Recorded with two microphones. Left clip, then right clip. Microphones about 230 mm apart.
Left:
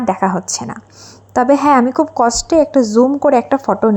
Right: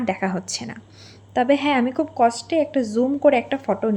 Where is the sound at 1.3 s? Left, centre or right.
Left.